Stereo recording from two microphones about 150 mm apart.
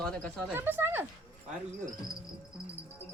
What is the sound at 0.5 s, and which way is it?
Speech, 15° right (ahead or behind).